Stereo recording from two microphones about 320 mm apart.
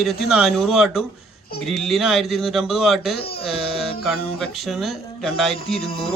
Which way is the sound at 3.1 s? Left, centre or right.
Left.